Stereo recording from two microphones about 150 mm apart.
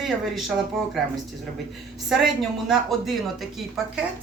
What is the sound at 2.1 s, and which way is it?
Speech, centre (ahead or behind).